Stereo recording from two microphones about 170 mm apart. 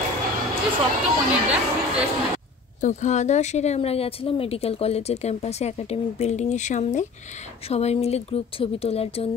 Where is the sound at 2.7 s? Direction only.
45° left (ahead or behind).